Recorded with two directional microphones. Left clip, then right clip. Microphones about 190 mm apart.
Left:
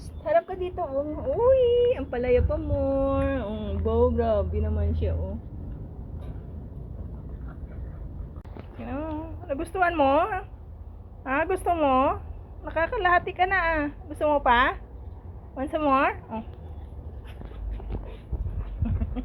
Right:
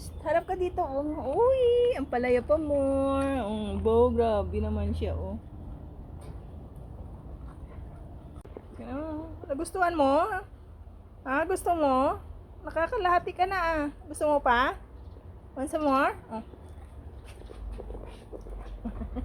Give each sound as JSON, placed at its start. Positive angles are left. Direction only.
{"t": 0.3, "sound": "a child's voice", "side_deg": -35}
{"t": 8.9, "sound": "a sound", "side_deg": -10}
{"t": 9.7, "sound": "a woman's voice", "side_deg": -15}